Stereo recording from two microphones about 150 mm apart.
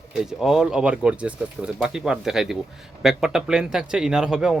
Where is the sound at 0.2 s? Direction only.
5° right (ahead or behind).